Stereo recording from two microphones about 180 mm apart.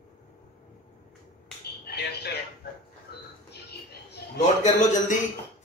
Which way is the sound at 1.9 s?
65° left (ahead or behind).